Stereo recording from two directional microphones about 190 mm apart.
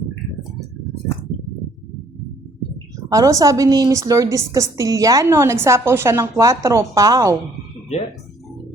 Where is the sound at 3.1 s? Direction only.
20° right (ahead or behind).